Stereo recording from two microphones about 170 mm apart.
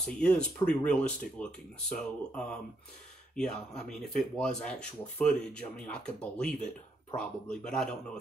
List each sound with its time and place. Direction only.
0.0 s speech: 5° left (ahead or behind)